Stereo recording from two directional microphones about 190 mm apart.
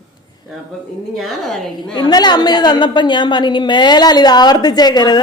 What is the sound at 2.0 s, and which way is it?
A woman's voice, 20° left (ahead or behind).